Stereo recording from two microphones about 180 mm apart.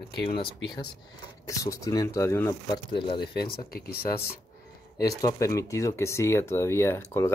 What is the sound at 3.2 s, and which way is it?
Speech, 60° left (ahead or behind).